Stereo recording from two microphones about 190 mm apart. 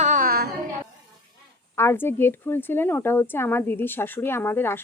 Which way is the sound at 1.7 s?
10° left (ahead or behind).